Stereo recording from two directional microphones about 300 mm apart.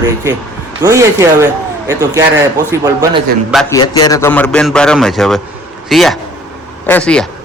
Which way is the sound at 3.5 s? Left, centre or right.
Centre.